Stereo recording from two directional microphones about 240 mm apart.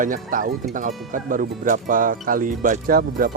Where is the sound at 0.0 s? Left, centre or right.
Right.